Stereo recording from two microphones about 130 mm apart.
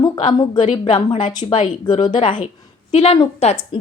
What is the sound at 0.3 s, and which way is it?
Speech, 35° left (ahead or behind).